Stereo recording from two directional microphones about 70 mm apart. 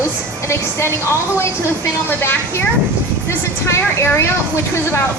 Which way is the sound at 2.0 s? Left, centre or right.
Left.